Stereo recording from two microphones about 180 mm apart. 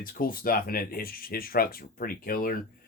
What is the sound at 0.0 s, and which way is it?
Speech, 55° left (ahead or behind).